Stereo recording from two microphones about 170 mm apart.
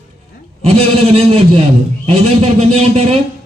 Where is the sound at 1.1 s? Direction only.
35° right (ahead or behind).